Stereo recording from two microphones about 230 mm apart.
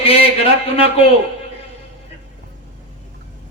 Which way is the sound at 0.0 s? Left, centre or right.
Left.